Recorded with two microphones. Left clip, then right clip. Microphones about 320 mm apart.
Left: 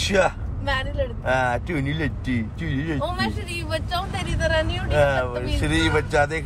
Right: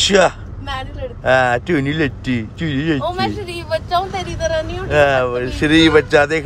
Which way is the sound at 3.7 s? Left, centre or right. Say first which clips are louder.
Right 9 dB; centre.